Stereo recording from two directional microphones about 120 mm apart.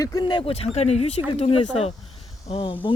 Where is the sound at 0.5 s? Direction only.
60° left (ahead or behind).